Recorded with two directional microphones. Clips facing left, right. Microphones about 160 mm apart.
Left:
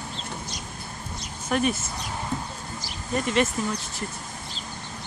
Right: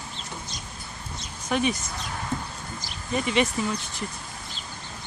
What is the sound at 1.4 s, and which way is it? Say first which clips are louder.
Speech: left 1 dB; centre (ahead or behind).